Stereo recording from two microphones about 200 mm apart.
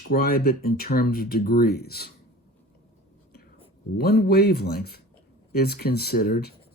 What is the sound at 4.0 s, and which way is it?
Speech, 50° left (ahead or behind).